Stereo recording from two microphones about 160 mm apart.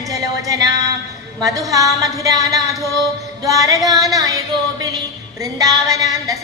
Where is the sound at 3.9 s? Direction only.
20° right (ahead or behind).